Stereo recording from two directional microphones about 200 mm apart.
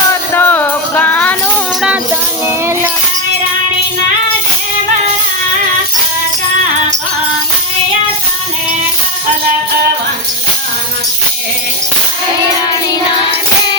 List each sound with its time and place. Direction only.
0.3 s music: 10° left (ahead or behind)